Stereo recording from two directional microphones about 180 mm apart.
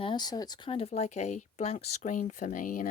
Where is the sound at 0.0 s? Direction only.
25° left (ahead or behind).